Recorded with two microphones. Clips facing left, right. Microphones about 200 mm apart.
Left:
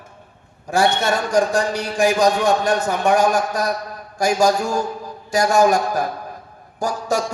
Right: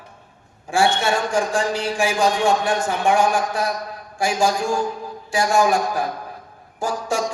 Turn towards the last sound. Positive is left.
turn(degrees=40)  # may be behind; listen again after turning